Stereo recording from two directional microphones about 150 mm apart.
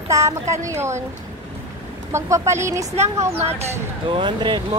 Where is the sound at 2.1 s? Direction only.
20° right (ahead or behind).